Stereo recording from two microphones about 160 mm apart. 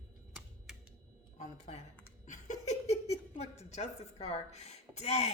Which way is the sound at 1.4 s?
45° left (ahead or behind).